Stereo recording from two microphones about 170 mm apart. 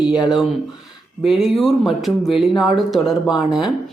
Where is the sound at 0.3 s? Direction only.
Centre (ahead or behind).